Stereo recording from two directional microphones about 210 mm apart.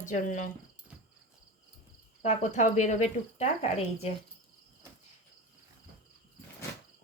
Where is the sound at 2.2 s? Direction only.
35° left (ahead or behind).